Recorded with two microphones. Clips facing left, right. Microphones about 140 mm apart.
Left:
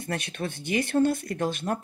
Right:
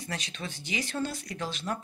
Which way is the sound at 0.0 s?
55° left (ahead or behind).